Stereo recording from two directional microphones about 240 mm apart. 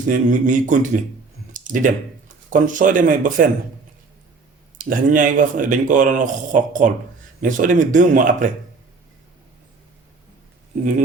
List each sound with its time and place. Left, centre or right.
0.0 s speech: right
1.5 s a sound: right
2.5 s speech: right
4.8 s speech: right